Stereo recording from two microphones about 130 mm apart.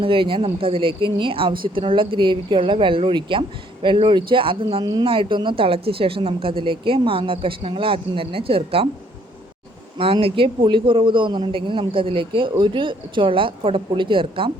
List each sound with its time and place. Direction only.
0.0 s a man's voice: 40° right (ahead or behind)
10.0 s a man's voice: 45° right (ahead or behind)